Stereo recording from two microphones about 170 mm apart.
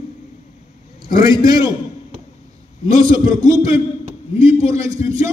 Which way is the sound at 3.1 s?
20° right (ahead or behind).